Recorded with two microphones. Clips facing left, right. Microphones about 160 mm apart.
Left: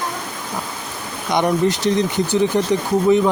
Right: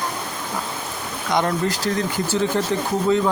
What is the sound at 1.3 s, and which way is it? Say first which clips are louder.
Speech: left 4 dB; 20° left (ahead or behind).